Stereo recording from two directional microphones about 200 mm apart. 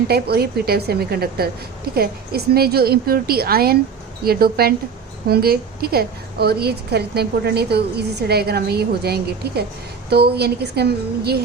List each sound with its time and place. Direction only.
0.1 s a woman's voice: 50° right (ahead or behind)